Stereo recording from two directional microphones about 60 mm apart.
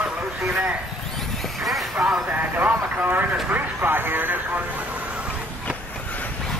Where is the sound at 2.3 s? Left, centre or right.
Right.